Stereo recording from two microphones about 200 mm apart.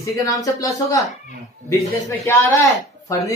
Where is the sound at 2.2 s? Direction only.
15° left (ahead or behind).